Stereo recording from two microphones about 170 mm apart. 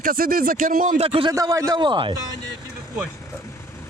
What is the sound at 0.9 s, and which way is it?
Speech, 35° right (ahead or behind).